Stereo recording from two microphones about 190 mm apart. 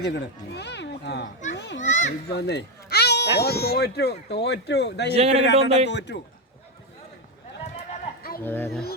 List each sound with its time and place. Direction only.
0.0 s a child's voice: 65° left (ahead or behind)
1.8 s a child's voice: 40° left (ahead or behind)
2.3 s baby cry: 60° left (ahead or behind)
3.3 s speech: 55° left (ahead or behind)
5.1 s a man's voice: 35° right (ahead or behind)
5.9 s speech: 65° left (ahead or behind)
8.4 s speech: 10° left (ahead or behind)